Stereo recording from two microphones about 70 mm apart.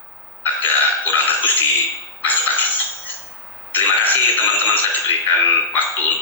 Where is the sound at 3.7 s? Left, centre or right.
Left.